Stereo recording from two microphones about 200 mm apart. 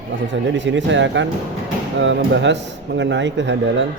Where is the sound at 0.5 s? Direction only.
65° right (ahead or behind).